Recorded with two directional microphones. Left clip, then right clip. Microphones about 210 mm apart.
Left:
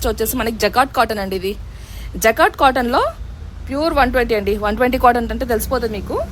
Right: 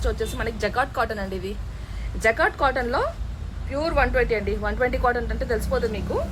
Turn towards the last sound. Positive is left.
turn(degrees=50)  # may be behind; listen again after turning